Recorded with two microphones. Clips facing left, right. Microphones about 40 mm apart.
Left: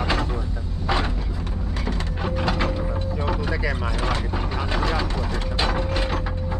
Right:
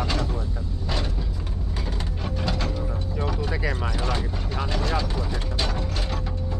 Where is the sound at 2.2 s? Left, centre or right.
Left.